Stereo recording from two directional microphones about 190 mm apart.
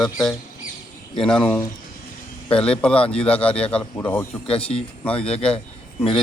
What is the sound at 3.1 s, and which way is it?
Speech, 30° left (ahead or behind).